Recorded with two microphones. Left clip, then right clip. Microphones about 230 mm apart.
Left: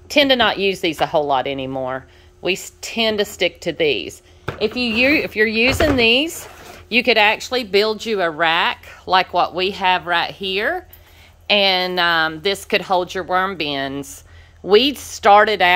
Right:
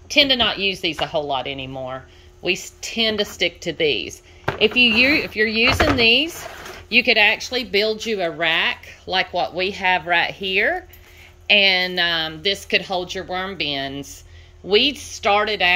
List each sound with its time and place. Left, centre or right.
0.1 s speech: centre